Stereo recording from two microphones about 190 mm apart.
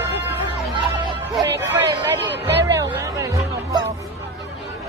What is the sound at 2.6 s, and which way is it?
Music, 15° right (ahead or behind).